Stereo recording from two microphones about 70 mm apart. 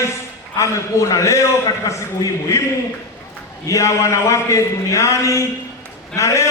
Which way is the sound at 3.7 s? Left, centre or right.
Left.